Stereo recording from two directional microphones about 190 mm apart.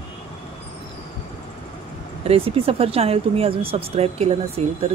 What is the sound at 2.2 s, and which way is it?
Speech, 30° right (ahead or behind).